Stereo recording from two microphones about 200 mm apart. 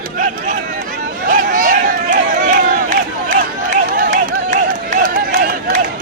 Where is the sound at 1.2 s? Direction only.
45° right (ahead or behind).